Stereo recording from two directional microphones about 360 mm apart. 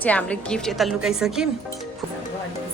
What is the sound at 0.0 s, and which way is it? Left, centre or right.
A woman's voice, centre.